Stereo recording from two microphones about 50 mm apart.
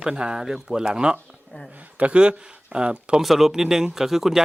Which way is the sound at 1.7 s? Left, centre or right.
Right.